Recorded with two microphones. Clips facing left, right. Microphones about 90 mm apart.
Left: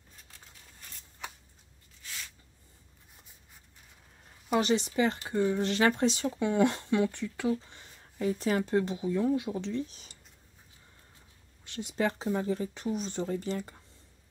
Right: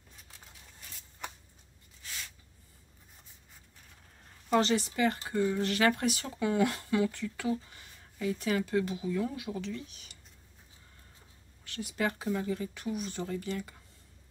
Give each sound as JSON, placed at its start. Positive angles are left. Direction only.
{"t": 4.5, "sound": "speech", "side_deg": 15}
{"t": 7.7, "sound": "speech", "side_deg": 35}
{"t": 11.6, "sound": "speech", "side_deg": 20}